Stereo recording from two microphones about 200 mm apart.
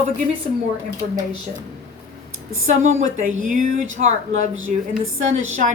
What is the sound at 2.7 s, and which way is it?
Speech, 35° right (ahead or behind).